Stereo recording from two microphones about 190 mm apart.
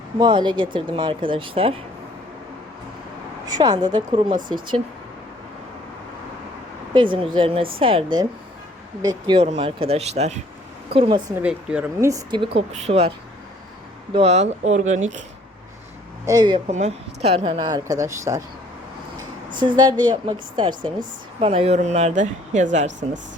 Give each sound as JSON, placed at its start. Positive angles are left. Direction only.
{"t": 0.2, "sound": "speech", "side_deg": -25}
{"t": 3.4, "sound": "speech", "side_deg": -20}
{"t": 6.9, "sound": "a woman's voice", "side_deg": -25}
{"t": 11.4, "sound": "speech", "side_deg": -5}
{"t": 12.8, "sound": "a woman's voice", "side_deg": -30}
{"t": 16.2, "sound": "speech", "side_deg": -20}
{"t": 16.6, "sound": "speech", "side_deg": -35}
{"t": 19.5, "sound": "a woman's voice", "side_deg": -25}